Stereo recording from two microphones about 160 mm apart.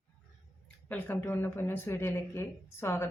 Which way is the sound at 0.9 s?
10° left (ahead or behind).